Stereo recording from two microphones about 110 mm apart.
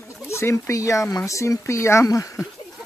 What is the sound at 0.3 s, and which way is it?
Speech, 25° left (ahead or behind).